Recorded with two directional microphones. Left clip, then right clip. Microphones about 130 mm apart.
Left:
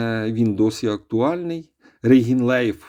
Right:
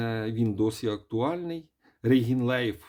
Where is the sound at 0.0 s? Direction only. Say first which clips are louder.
Left 8 dB; 30° left (ahead or behind).